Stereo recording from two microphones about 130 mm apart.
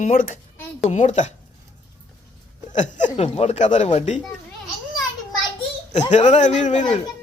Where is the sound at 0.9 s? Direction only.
65° left (ahead or behind).